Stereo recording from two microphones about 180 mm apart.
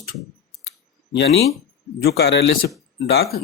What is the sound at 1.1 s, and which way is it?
Speech, 70° left (ahead or behind).